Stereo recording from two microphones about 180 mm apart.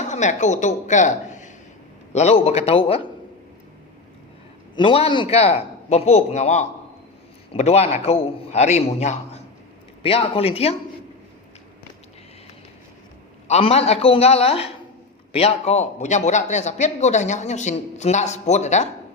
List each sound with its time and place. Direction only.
0.0 s a man's voice: 40° left (ahead or behind)
4.8 s a man's voice: 30° left (ahead or behind)
13.5 s a man's voice: 35° left (ahead or behind)